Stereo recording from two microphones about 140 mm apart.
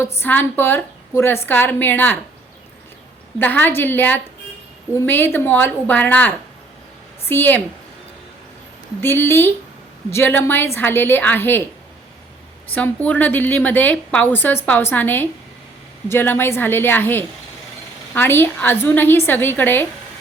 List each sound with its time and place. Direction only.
0.0 s a woman's voice: 15° left (ahead or behind)
3.3 s a woman's voice: 15° left (ahead or behind)
9.0 s a woman's voice: 15° left (ahead or behind)
12.7 s a woman's voice: 10° left (ahead or behind)